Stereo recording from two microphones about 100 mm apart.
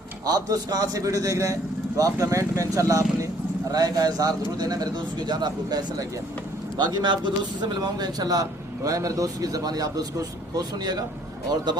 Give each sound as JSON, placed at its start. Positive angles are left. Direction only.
{"t": 0.3, "sound": "a man's voice", "side_deg": -40}